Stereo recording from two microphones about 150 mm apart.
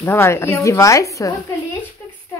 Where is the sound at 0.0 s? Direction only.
15° left (ahead or behind).